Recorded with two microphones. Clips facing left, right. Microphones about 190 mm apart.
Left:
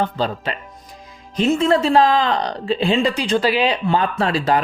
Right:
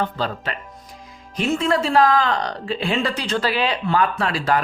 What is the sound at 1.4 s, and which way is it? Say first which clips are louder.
Speech: left 4 dB; 25° left (ahead or behind).